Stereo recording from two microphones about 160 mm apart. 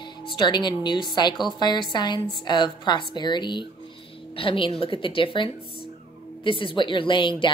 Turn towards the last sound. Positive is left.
turn(degrees=30)  # may be behind; listen again after turning